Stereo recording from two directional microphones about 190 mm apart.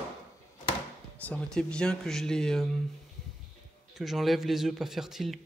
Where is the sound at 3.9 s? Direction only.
Centre (ahead or behind).